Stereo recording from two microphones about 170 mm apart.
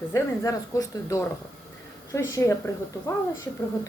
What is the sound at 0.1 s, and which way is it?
A woman's voice, 20° left (ahead or behind).